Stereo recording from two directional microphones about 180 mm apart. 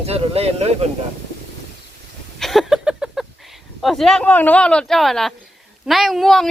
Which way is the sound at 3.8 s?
Centre (ahead or behind).